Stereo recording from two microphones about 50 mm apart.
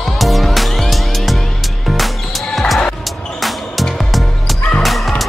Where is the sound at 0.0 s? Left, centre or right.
Centre.